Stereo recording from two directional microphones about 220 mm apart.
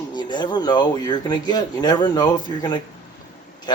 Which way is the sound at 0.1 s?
20° left (ahead or behind).